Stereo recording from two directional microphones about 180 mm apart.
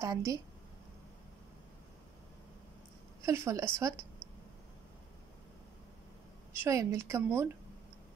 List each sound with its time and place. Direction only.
0.0 s a woman's voice: 15° right (ahead or behind)
3.2 s a woman's voice: 15° right (ahead or behind)
6.6 s a woman's voice: 15° right (ahead or behind)